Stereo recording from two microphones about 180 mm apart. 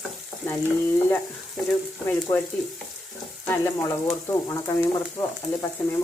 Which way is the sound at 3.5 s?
15° left (ahead or behind).